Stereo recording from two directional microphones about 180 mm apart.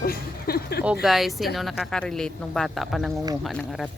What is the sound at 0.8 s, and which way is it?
A woman's voice, 5° right (ahead or behind).